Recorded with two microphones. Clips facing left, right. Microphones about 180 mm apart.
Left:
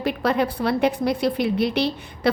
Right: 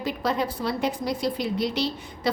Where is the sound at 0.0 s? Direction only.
65° left (ahead or behind).